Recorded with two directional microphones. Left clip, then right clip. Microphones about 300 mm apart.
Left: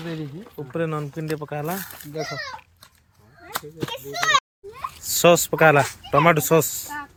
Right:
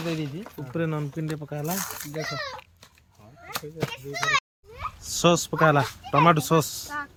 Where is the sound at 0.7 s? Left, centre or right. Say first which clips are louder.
Left 3 dB; centre.